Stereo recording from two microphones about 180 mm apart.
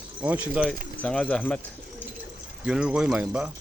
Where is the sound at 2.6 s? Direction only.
5° right (ahead or behind).